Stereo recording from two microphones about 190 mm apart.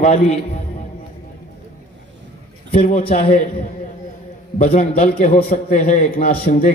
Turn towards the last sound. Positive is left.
turn(degrees=40)  # may be behind; listen again after turning